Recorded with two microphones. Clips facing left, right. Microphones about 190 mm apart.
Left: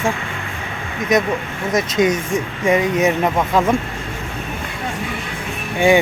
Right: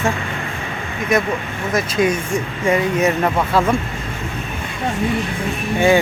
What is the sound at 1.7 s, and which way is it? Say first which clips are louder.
Speech: left 1 dB; 20° left (ahead or behind).